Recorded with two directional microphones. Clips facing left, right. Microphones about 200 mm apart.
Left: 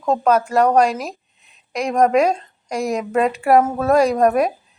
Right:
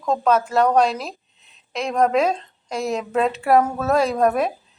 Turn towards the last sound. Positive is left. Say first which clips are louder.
# left 3 dB
turn(degrees=10)  # may be behind; listen again after turning